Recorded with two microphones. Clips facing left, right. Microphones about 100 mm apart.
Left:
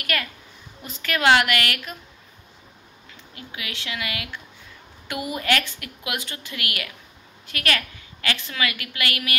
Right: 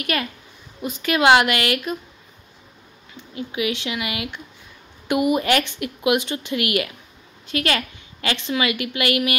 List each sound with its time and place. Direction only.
0.0 s a woman's voice: 20° right (ahead or behind)
3.2 s a woman's voice: 20° right (ahead or behind)